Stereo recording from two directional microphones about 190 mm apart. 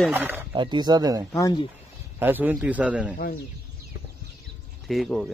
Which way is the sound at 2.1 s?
10° right (ahead or behind).